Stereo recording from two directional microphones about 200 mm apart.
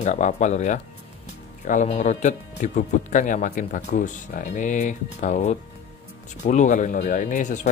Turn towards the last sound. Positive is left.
turn(degrees=40)  # may be behind; listen again after turning